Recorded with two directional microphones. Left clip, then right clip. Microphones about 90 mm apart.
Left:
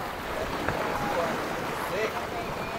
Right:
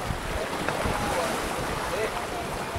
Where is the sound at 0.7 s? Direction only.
35° right (ahead or behind).